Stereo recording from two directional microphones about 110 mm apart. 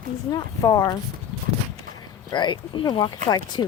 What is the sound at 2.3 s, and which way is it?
Speech, 45° left (ahead or behind).